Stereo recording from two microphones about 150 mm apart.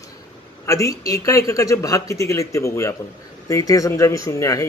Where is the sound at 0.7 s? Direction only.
20° left (ahead or behind).